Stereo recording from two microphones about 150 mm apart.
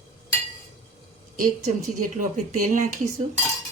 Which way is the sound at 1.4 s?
65° right (ahead or behind).